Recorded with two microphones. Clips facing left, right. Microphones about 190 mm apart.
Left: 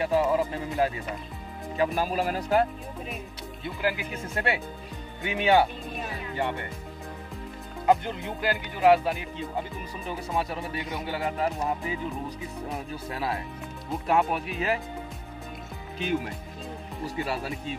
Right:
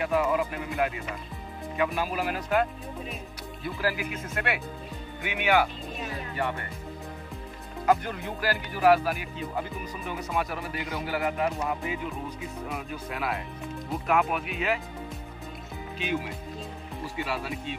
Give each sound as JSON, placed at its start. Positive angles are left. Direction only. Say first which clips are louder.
{"t": 0.0, "sound": "speech", "louder": "left 2 dB", "side_deg": 30}
{"t": 3.6, "sound": "speech", "louder": "even", "side_deg": 25}
{"t": 7.8, "sound": "speech", "louder": "left 1 dB", "side_deg": 25}
{"t": 17.2, "sound": "speech", "louder": "left 1 dB", "side_deg": 40}